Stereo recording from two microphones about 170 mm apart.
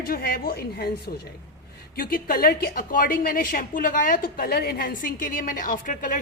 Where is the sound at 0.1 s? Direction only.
65° left (ahead or behind).